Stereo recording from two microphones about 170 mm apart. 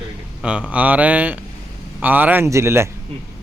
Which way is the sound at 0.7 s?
10° right (ahead or behind).